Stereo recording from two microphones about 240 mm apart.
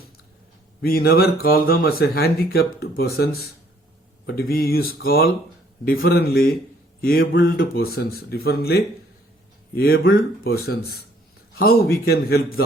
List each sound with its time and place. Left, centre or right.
0.8 s speech: left